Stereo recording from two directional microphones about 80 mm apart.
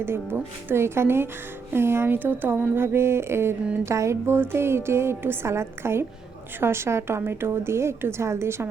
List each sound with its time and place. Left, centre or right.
0.0 s a woman's voice: right